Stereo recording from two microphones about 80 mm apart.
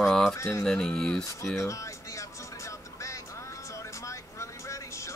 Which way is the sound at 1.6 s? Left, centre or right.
Left.